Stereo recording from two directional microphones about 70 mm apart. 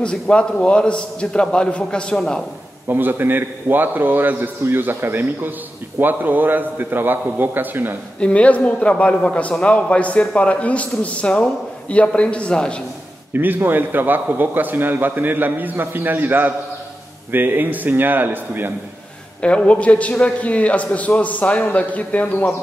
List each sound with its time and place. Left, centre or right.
0.0 s a man's voice: centre
2.9 s a man's voice: right
8.2 s a man's voice: centre
13.3 s a man's voice: right
19.4 s a man's voice: centre